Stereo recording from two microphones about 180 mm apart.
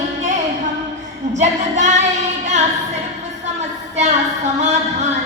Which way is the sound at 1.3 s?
40° right (ahead or behind).